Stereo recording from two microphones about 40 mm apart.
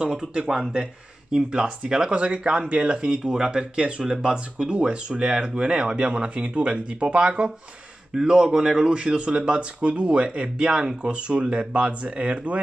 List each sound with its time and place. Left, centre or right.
0.1 s speech: right
8.9 s speech: right